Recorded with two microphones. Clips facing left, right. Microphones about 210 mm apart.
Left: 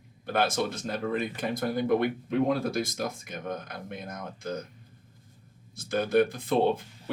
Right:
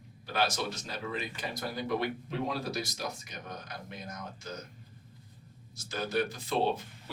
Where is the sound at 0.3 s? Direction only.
55° left (ahead or behind).